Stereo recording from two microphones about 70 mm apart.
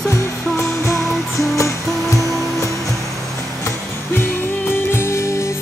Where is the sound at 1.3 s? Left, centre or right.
Left.